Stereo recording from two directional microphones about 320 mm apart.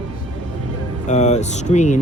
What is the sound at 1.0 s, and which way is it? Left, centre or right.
Speech, left.